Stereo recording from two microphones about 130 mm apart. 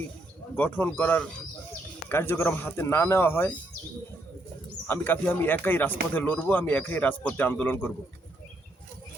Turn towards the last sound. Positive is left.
turn(degrees=10)  # may be behind; listen again after turning